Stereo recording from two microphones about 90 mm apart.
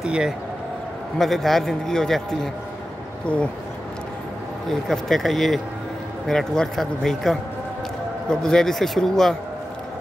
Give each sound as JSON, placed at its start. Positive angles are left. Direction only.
{"t": 0.0, "sound": "a sound", "side_deg": -10}
{"t": 1.1, "sound": "a man's voice", "side_deg": 5}
{"t": 4.8, "sound": "a man's voice", "side_deg": 5}